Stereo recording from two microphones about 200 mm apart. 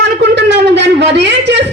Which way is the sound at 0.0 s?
60° right (ahead or behind).